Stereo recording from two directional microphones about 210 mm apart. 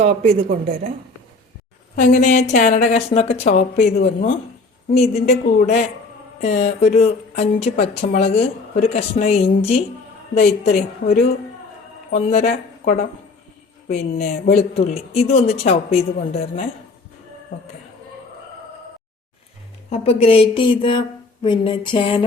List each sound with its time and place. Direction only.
0.0 s a woman's voice: 30° right (ahead or behind)
2.0 s a woman's voice: 35° left (ahead or behind)
19.9 s speech: 30° left (ahead or behind)